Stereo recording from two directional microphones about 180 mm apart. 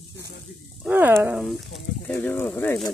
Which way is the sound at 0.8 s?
10° right (ahead or behind).